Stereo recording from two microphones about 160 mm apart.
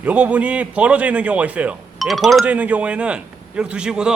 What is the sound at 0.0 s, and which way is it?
A man's voice, 10° right (ahead or behind).